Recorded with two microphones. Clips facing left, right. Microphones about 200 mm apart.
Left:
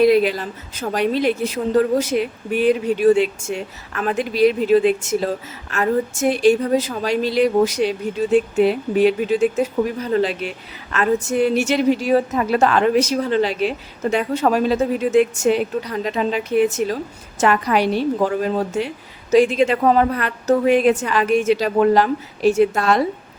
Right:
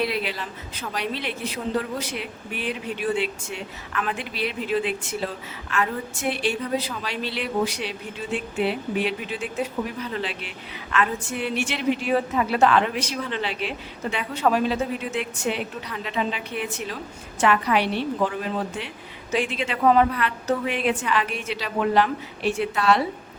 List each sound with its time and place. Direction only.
0.0 s a woman's voice: 45° left (ahead or behind)